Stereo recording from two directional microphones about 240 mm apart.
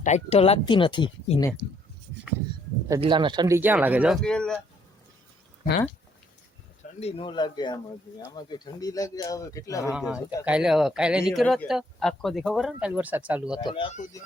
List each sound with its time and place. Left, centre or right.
0.0 s speech: left
2.9 s speech: centre
7.0 s speech: left
9.9 s speech: centre
13.6 s speech: left